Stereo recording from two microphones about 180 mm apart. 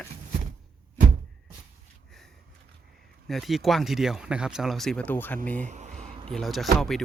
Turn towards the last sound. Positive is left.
turn(degrees=0)  # may be behind; listen again after turning